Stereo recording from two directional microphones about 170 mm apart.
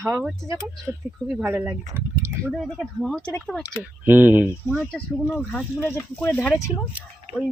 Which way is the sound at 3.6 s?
10° right (ahead or behind).